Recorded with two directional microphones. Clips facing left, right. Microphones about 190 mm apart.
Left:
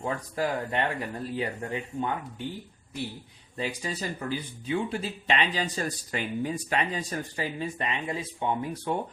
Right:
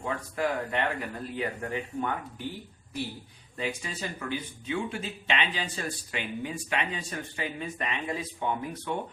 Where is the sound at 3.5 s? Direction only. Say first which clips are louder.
Left 2 dB; 35° left (ahead or behind).